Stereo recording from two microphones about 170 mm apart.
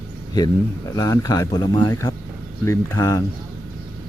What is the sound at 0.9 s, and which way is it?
Speech, 20° left (ahead or behind).